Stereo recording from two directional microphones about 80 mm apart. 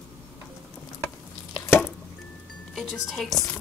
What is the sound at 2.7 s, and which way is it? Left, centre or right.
Music, centre.